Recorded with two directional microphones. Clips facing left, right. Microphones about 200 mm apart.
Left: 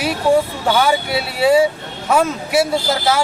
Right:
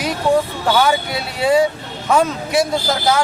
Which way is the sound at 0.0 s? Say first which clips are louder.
Left 1 dB; 5° left (ahead or behind).